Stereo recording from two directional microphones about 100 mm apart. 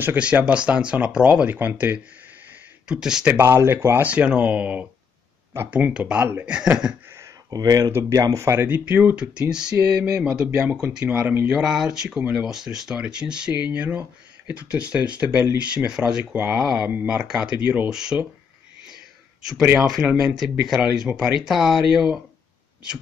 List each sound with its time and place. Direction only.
0.0 s speech: 15° right (ahead or behind)
2.9 s speech: 5° right (ahead or behind)
3.3 s speech: 25° right (ahead or behind); by 7.0 s 10° right (ahead or behind)
7.2 s a sound: 35° right (ahead or behind)
8.1 s speech: 35° right (ahead or behind)
8.6 s speech: 20° right (ahead or behind)
11.6 s speech: 5° right (ahead or behind)
20.2 s speech: 5° right (ahead or behind)